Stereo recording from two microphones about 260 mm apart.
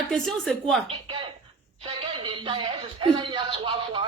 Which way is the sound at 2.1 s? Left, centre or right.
Centre.